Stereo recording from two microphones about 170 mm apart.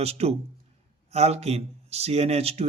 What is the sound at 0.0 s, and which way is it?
Speech, 35° right (ahead or behind).